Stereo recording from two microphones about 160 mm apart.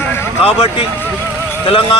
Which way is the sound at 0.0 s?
15° left (ahead or behind).